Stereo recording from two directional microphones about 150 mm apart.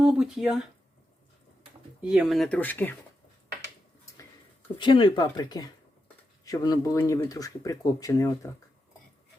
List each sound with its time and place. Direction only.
0.0 s speech: 5° right (ahead or behind)
2.0 s speech: 5° right (ahead or behind)
2.6 s speech: 10° left (ahead or behind)
4.8 s speech: 30° left (ahead or behind)